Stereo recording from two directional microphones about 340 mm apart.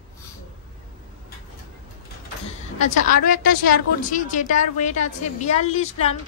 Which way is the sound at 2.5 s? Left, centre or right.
Left.